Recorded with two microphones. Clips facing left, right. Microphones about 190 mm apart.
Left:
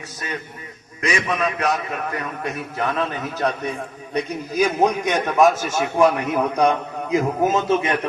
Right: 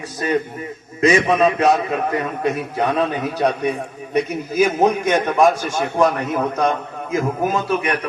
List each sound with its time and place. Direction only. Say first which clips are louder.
1.0 s a man's voice: right 8 dB; 25° right (ahead or behind); by 5.5 s centre (ahead or behind)
6.0 s a man's voice: left 1 dB; 10° left (ahead or behind)